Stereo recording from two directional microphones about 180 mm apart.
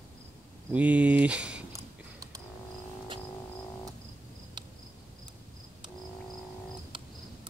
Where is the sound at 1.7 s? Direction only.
20° right (ahead or behind).